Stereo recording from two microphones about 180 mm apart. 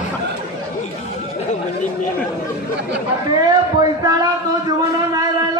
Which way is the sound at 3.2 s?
20° right (ahead or behind).